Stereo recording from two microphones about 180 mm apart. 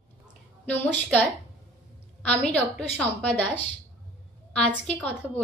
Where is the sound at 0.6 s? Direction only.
10° left (ahead or behind).